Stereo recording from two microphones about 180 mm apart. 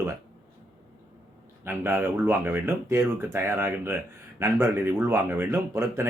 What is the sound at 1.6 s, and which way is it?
Speech, 15° right (ahead or behind).